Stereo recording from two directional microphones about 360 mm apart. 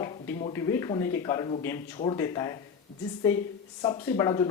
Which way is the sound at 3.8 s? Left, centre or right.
Centre.